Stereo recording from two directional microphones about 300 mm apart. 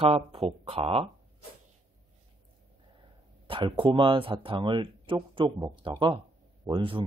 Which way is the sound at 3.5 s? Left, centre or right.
Centre.